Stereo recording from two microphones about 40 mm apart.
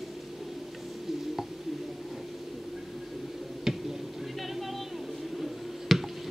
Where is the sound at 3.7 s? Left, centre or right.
Centre.